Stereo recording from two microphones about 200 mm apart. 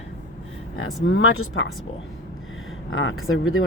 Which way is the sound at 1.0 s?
75° left (ahead or behind).